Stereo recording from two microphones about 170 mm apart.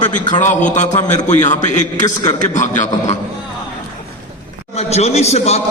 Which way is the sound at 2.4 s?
45° left (ahead or behind).